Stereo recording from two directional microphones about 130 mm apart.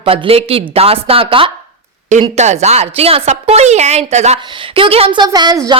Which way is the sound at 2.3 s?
60° right (ahead or behind).